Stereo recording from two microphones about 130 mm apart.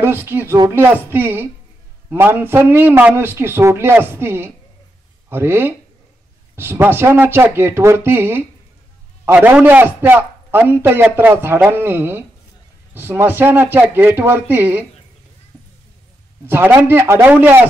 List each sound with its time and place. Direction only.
0.0 s a man's voice: 15° right (ahead or behind)
16.4 s a man's voice: 15° right (ahead or behind)